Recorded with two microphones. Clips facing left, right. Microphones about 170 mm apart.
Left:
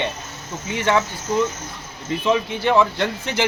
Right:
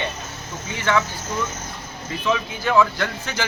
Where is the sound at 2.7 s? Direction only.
25° left (ahead or behind).